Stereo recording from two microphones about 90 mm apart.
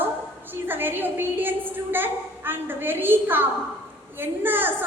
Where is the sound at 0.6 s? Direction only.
25° right (ahead or behind).